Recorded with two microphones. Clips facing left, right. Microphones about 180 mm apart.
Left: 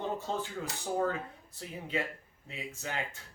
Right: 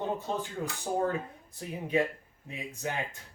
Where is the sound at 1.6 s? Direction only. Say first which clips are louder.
Right 7 dB; 15° right (ahead or behind).